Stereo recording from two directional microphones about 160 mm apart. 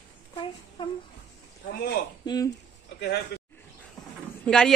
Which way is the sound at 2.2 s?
25° left (ahead or behind).